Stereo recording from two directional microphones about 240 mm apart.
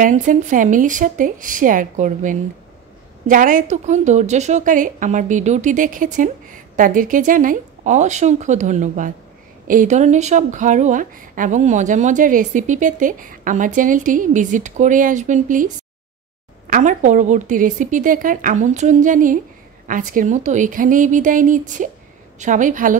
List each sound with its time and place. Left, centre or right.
0.0 s speech: right